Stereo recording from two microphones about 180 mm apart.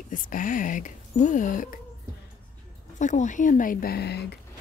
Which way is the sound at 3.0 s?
45° left (ahead or behind).